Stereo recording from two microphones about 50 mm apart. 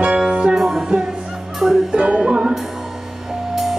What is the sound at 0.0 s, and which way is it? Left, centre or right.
Music, centre.